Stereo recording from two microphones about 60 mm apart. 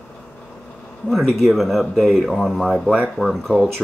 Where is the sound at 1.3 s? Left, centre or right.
Centre.